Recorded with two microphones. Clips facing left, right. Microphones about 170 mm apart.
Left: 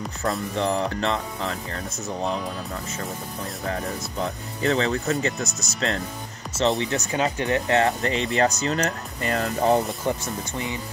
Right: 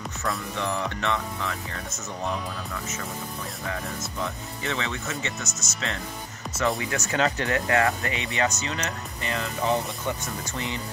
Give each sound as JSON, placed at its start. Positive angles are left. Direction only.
{"t": 0.6, "sound": "speech", "side_deg": 30}
{"t": 6.8, "sound": "speech", "side_deg": 20}
{"t": 10.1, "sound": "speech", "side_deg": 35}